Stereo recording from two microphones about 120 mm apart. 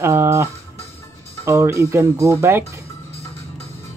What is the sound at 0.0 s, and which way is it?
Music, 20° right (ahead or behind).